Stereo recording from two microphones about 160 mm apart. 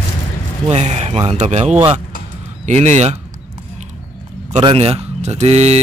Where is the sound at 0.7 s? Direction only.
40° right (ahead or behind).